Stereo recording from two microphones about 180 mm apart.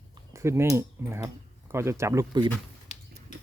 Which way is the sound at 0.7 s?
15° right (ahead or behind).